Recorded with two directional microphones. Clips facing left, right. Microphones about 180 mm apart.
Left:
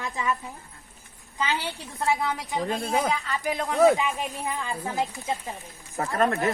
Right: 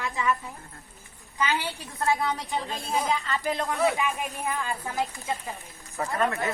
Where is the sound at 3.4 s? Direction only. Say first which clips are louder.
Left 8 dB; 15° left (ahead or behind).